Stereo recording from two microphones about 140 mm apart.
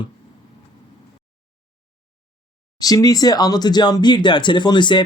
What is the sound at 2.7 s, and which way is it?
Speech, 25° left (ahead or behind).